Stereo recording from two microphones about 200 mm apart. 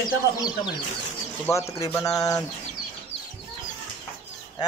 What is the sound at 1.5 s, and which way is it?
Speech, 15° left (ahead or behind).